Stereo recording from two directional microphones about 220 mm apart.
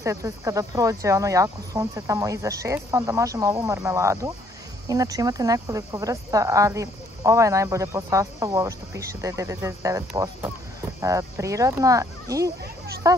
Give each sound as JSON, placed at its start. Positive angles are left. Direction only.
{"t": 0.0, "sound": "speech", "side_deg": -15}